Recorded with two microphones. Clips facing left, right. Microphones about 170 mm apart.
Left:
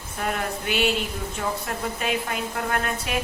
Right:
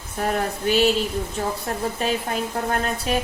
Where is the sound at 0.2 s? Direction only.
35° right (ahead or behind).